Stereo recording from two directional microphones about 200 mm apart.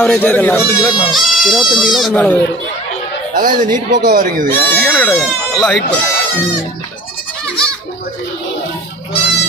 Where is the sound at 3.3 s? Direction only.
40° right (ahead or behind).